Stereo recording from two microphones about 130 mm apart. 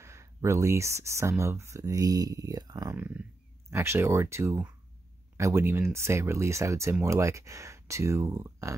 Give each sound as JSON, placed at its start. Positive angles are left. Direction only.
{"t": 0.0, "sound": "speech", "side_deg": -20}
{"t": 3.0, "sound": "speech", "side_deg": -15}